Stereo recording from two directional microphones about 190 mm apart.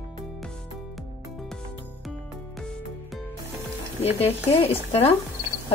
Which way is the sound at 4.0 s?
30° left (ahead or behind).